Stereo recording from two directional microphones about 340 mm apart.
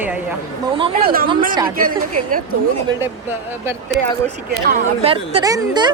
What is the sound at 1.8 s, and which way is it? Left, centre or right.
Speech, right.